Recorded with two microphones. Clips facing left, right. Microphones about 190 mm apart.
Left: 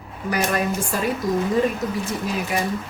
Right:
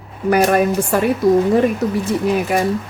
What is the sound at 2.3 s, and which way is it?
Speech, 55° right (ahead or behind).